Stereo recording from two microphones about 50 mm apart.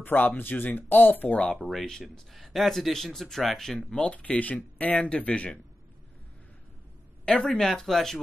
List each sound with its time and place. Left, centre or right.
0.0 s speech: left
1.6 s speech: centre
4.2 s speech: left
7.2 s speech: centre